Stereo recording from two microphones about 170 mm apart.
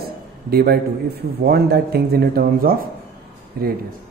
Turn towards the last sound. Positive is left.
turn(degrees=-60)  # may be behind; listen again after turning